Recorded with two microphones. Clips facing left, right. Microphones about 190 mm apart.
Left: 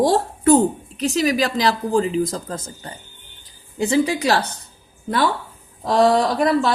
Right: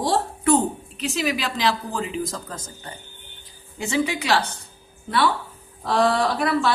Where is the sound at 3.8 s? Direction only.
35° left (ahead or behind).